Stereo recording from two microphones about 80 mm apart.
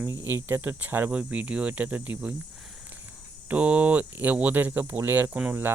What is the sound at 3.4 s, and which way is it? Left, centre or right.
Speech, centre.